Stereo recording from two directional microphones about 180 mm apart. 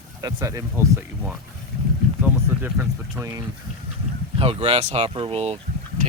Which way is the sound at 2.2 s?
10° right (ahead or behind).